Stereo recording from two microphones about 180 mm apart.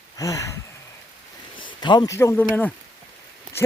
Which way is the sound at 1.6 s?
25° left (ahead or behind).